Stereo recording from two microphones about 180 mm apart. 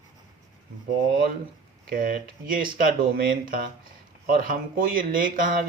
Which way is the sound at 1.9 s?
50° right (ahead or behind).